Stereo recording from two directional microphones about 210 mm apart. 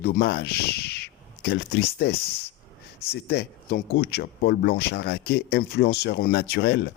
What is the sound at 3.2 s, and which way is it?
Speech, 50° left (ahead or behind).